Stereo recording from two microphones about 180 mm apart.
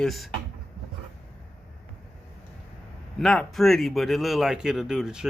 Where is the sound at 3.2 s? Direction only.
Centre (ahead or behind).